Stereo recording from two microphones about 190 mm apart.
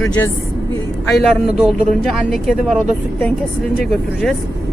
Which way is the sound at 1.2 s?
Centre (ahead or behind).